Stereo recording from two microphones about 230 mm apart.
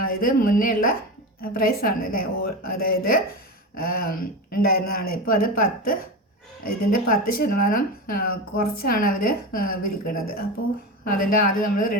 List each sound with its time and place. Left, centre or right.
0.2 s speech: left